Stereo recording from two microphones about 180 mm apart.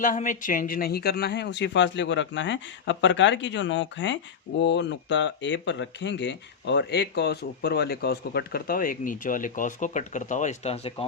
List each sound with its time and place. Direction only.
0.0 s speech: 45° left (ahead or behind); by 4.2 s 90° left
4.6 s speech: 80° left; by 10.9 s 35° left (ahead or behind)